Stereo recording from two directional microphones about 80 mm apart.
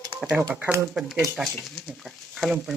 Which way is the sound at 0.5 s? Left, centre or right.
Right.